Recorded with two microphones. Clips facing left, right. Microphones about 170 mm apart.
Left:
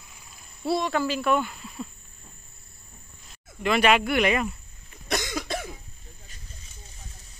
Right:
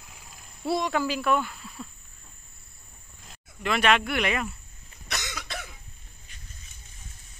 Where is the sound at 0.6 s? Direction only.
15° right (ahead or behind).